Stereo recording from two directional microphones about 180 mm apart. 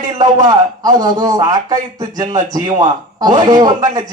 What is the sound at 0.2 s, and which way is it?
A man's voice, 20° right (ahead or behind).